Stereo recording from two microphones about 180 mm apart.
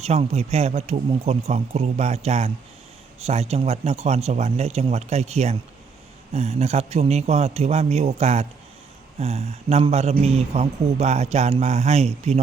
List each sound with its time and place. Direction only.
0.0 s speech: 35° right (ahead or behind)